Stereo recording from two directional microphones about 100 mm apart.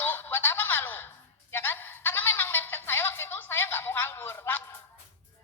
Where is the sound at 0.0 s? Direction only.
20° left (ahead or behind).